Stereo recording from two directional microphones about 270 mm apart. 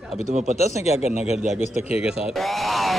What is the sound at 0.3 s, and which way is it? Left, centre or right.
Speech, right.